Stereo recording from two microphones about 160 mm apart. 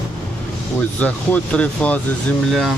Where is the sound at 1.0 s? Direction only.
10° left (ahead or behind).